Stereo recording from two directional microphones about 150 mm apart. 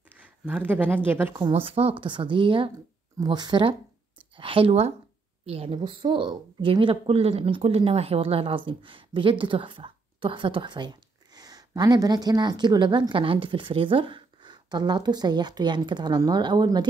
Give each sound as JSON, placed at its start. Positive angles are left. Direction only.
{"t": 0.5, "sound": "speech", "side_deg": -10}
{"t": 1.5, "sound": "a woman's voice", "side_deg": -40}